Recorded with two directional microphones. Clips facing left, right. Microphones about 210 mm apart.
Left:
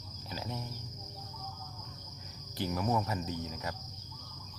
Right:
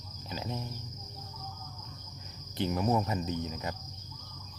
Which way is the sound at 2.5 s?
25° right (ahead or behind).